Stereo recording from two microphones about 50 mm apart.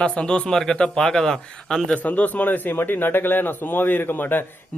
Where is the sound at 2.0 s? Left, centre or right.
Left.